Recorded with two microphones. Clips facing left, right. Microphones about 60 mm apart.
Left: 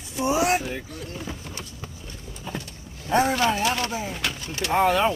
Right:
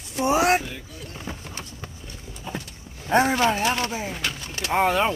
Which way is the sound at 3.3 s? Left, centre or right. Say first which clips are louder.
Right 1 dB; right.